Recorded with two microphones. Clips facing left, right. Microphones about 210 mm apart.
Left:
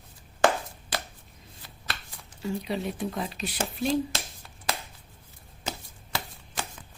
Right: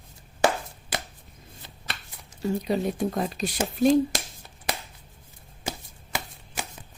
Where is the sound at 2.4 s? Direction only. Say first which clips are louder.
Right 5 dB; 40° right (ahead or behind).